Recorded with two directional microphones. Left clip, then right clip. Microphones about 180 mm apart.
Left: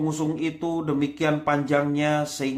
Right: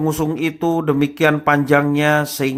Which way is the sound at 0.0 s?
30° right (ahead or behind).